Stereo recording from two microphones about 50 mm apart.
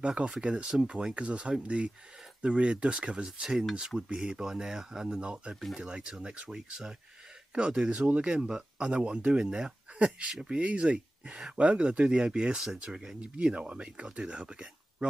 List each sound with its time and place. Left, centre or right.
0.0 s speech: centre
6.5 s speech: centre